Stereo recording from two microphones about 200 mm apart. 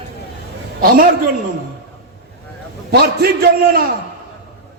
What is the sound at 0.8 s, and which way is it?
Speech, 45° right (ahead or behind).